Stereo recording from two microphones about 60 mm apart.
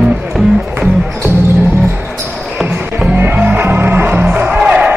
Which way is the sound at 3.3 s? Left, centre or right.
Right.